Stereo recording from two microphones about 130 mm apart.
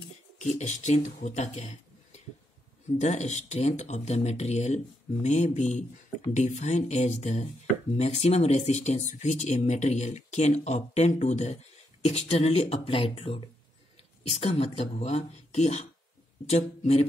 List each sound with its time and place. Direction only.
0.4 s speech: 60° left (ahead or behind)